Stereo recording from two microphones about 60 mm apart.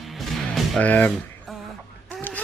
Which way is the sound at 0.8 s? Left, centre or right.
Left.